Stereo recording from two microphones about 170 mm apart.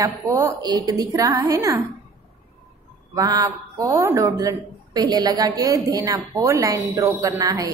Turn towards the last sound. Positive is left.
turn(degrees=-15)  # may be behind; listen again after turning